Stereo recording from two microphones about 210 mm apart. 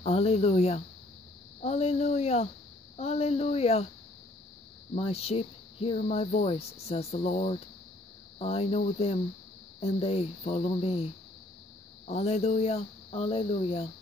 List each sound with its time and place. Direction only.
0.0 s speech: 30° left (ahead or behind)
4.9 s speech: 30° left (ahead or behind)
12.1 s speech: 30° left (ahead or behind)